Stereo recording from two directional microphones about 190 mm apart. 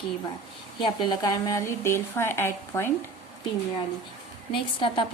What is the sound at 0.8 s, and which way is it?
A woman's voice, 25° left (ahead or behind).